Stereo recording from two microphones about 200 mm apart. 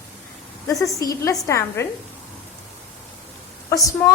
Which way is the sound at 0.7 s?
15° left (ahead or behind).